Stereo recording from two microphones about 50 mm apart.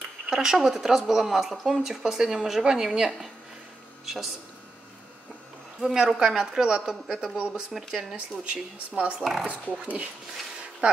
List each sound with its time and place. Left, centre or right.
0.3 s speech: centre
5.8 s speech: centre
7.3 s speech: right
9.2 s speech: centre
9.5 s speech: right